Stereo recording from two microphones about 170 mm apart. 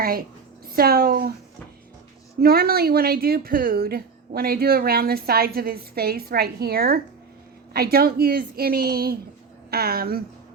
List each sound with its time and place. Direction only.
0.7 s speech: 65° right (ahead or behind)
2.4 s speech: 65° right (ahead or behind)